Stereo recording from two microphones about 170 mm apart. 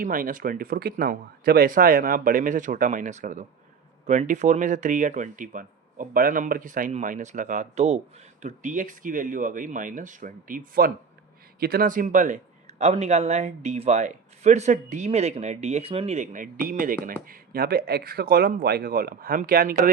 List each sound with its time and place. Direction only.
0.0 s speech: 55° right (ahead or behind)